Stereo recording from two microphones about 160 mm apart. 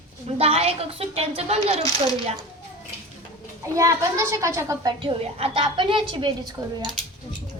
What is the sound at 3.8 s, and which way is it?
A child's voice, 20° right (ahead or behind).